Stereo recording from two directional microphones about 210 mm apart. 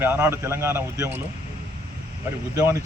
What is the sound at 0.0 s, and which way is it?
A man's voice, 10° right (ahead or behind).